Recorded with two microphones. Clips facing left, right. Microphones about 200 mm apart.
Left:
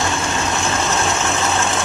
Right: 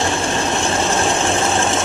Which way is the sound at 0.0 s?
30° right (ahead or behind).